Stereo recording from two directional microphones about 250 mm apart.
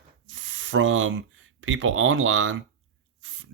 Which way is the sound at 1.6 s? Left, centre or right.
Right.